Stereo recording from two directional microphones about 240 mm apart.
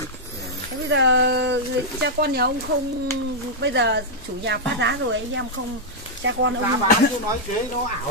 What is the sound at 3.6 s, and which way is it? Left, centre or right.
A woman's voice, right.